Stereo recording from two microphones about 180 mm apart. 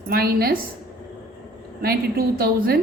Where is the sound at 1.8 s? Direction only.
55° right (ahead or behind).